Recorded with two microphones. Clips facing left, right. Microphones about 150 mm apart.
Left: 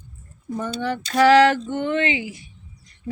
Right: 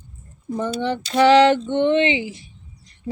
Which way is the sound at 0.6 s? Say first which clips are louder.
Right 3 dB; 25° right (ahead or behind).